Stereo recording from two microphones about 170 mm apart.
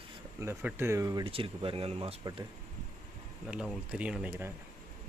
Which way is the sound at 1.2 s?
30° right (ahead or behind).